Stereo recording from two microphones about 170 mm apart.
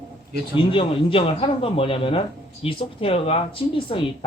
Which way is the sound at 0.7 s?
30° left (ahead or behind).